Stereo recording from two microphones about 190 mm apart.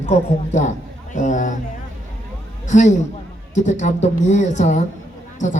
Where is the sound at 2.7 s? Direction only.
40° left (ahead or behind).